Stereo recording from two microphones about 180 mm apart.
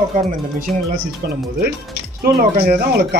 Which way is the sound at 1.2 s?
60° right (ahead or behind).